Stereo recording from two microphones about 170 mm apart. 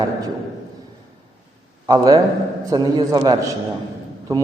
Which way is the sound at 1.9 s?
25° right (ahead or behind).